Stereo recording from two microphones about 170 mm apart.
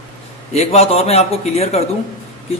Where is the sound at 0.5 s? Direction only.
40° left (ahead or behind).